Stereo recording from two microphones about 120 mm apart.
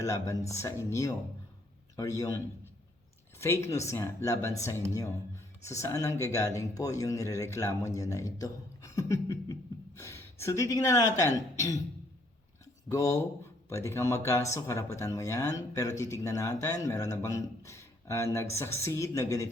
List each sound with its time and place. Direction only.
0.0 s speech: 25° left (ahead or behind)
3.4 s speech: 20° left (ahead or behind)
12.9 s speech: 30° left (ahead or behind)